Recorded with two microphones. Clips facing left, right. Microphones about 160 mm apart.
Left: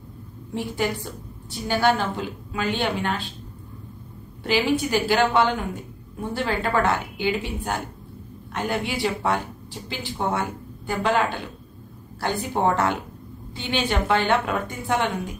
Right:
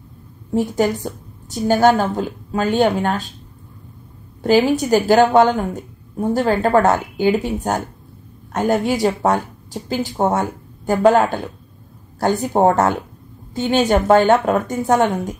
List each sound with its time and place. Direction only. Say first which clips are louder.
0.5 s a woman's voice: right 8 dB; 40° right (ahead or behind)
4.4 s a woman's voice: right 7 dB; 40° right (ahead or behind)